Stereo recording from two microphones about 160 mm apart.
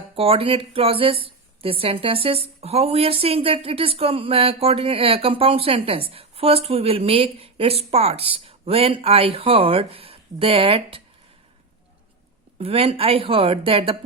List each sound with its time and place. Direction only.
0.2 s a woman's voice: 35° right (ahead or behind)
12.5 s a woman's voice: 35° right (ahead or behind)